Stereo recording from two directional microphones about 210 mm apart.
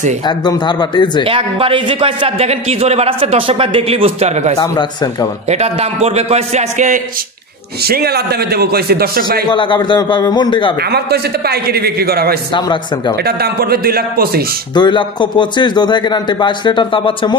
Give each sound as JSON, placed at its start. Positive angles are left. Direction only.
{"t": 0.2, "sound": "a man's voice", "side_deg": 20}
{"t": 1.2, "sound": "a man's voice", "side_deg": -25}
{"t": 4.6, "sound": "speech", "side_deg": 15}
{"t": 5.5, "sound": "a man's voice", "side_deg": -30}
{"t": 7.8, "sound": "a man's voice", "side_deg": -50}
{"t": 9.5, "sound": "a man's voice", "side_deg": 20}
{"t": 10.8, "sound": "a man's voice", "side_deg": -50}
{"t": 12.5, "sound": "a man's voice", "side_deg": 20}
{"t": 13.2, "sound": "a man's voice", "side_deg": -45}
{"t": 14.7, "sound": "a man's voice", "side_deg": 20}